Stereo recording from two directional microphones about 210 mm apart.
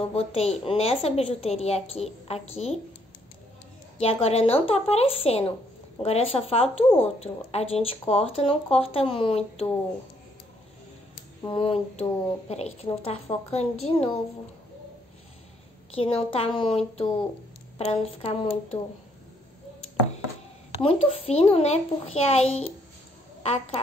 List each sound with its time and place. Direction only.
0.1 s speech: 30° left (ahead or behind)
4.0 s speech: 30° left (ahead or behind)
11.4 s speech: 25° left (ahead or behind)
16.0 s speech: 30° left (ahead or behind)
20.8 s speech: 30° left (ahead or behind)